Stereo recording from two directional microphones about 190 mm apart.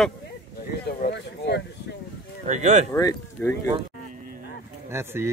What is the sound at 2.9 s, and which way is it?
Speech, 15° left (ahead or behind).